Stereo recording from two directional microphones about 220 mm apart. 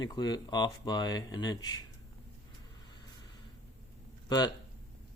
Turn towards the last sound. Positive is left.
turn(degrees=20)  # may be behind; listen again after turning